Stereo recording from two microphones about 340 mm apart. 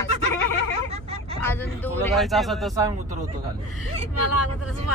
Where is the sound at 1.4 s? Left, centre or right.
Centre.